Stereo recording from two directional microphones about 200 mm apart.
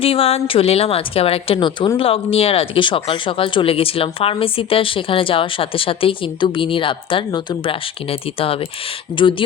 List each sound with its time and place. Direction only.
0.0 s speech: 30° left (ahead or behind)